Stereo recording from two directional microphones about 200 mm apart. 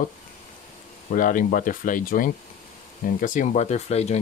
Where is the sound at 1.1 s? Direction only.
40° left (ahead or behind).